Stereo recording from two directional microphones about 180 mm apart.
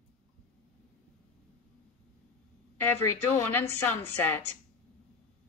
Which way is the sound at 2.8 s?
10° left (ahead or behind).